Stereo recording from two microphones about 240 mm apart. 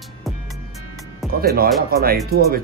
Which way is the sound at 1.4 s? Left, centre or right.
Right.